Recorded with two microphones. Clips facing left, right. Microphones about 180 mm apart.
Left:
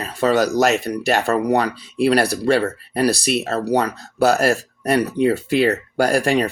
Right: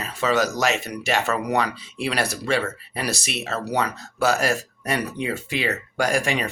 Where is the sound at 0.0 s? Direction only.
35° left (ahead or behind).